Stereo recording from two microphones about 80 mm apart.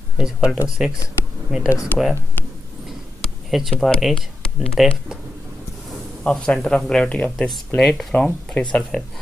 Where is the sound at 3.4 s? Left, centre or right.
Centre.